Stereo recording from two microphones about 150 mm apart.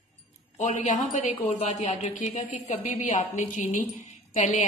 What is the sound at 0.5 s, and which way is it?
A woman's voice, 55° left (ahead or behind).